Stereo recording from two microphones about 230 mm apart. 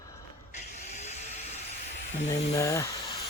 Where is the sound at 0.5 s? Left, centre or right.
Left.